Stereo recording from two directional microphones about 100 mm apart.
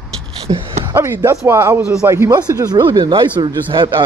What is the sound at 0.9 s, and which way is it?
A man's voice, 25° right (ahead or behind).